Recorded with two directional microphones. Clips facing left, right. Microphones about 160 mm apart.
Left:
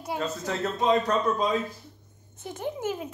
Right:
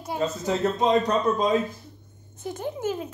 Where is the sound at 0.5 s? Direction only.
20° right (ahead or behind).